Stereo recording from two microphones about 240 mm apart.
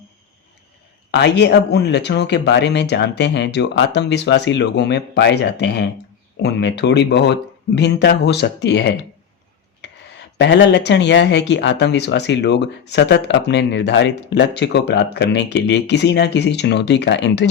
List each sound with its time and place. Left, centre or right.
1.1 s speech: left